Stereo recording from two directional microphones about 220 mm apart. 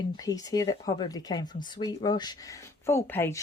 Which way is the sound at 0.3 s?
15° left (ahead or behind).